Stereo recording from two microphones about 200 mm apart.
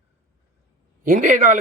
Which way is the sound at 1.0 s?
40° right (ahead or behind).